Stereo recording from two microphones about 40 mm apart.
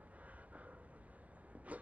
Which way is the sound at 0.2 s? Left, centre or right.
Right.